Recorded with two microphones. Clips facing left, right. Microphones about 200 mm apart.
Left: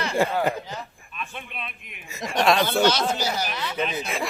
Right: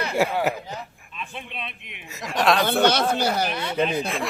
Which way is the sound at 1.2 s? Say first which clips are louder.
Right 1 dB; 25° right (ahead or behind).